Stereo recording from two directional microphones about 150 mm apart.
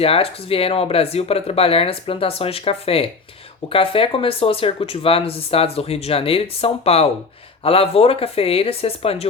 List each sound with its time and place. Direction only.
0.0 s speech: 40° left (ahead or behind)